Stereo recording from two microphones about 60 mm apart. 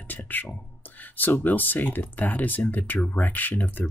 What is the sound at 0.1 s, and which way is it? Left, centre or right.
Speech, left.